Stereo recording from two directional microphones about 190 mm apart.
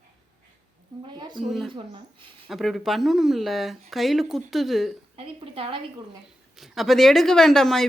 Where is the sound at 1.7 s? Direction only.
25° right (ahead or behind).